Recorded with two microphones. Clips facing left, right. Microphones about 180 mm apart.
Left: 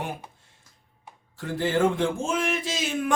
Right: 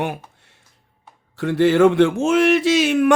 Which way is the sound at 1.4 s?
75° right (ahead or behind).